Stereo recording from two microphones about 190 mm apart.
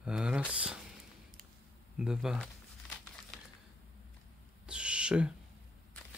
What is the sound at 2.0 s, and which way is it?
Speech, 5° right (ahead or behind).